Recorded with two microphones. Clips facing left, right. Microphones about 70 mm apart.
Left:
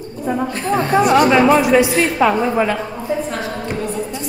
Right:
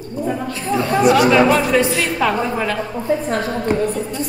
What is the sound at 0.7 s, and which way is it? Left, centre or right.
Speech, left.